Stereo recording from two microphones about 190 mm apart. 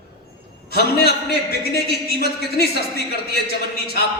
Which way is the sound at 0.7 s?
55° left (ahead or behind).